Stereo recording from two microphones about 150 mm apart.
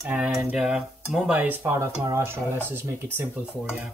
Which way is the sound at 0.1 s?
5° right (ahead or behind).